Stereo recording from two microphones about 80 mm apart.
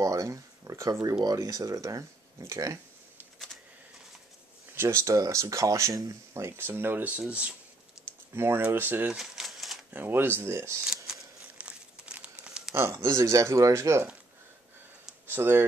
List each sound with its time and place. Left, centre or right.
0.0 s a sound: right
1.2 s speech: right
4.7 s speech: right; by 7.5 s centre
8.0 s typing: centre
8.4 s speech: right
9.1 s typewriter: centre
9.9 s speech: right
11.1 s crumpling: centre
12.7 s speech: right
15.2 s speech: right